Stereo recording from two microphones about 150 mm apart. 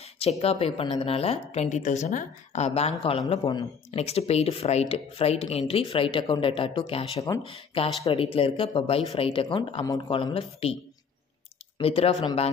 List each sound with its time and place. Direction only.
0.0 s a woman's voice: 45° left (ahead or behind)
7.2 s speech: 25° left (ahead or behind)
7.4 s speech: 35° left (ahead or behind)
11.8 s speech: 40° left (ahead or behind)